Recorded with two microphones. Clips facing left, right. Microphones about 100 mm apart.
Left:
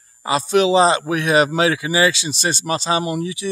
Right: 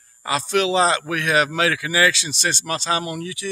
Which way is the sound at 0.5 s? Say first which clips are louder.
Left 4 dB; 20° left (ahead or behind).